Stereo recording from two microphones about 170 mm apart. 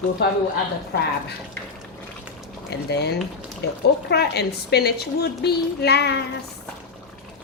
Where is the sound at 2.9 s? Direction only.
75° left (ahead or behind).